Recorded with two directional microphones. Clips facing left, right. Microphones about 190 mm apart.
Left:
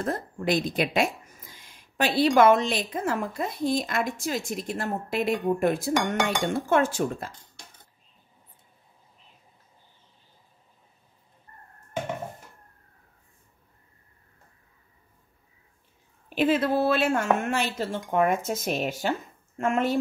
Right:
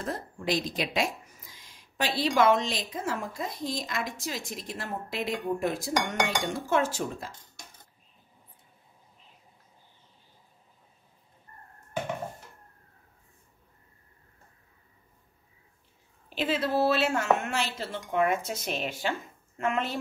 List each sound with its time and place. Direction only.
0.0 s a woman's voice: 50° left (ahead or behind)
16.3 s a woman's voice: 55° left (ahead or behind)